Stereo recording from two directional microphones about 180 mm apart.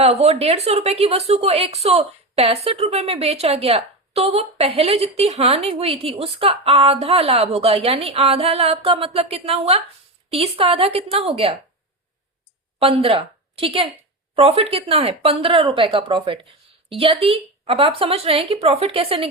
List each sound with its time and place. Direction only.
0.0 s a woman's voice: 35° right (ahead or behind)
12.8 s a woman's voice: 30° right (ahead or behind)